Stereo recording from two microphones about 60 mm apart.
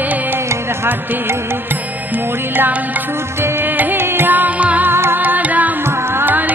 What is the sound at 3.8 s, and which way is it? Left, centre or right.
Music, right.